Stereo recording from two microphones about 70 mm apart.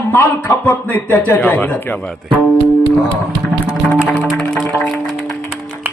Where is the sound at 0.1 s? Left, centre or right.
Left.